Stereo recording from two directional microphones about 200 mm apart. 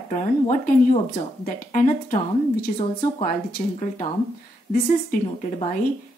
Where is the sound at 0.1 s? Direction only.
40° left (ahead or behind).